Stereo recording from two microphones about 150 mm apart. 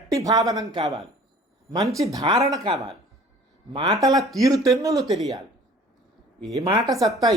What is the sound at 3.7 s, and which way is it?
Speech, 25° right (ahead or behind).